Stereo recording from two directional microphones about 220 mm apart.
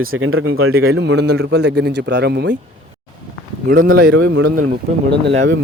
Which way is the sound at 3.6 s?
40° right (ahead or behind).